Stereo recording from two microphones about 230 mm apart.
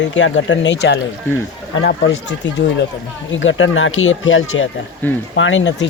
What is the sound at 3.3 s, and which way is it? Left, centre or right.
Speech, left.